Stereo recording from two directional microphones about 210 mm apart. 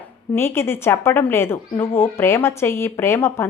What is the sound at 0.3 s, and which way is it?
A woman's voice, 10° left (ahead or behind).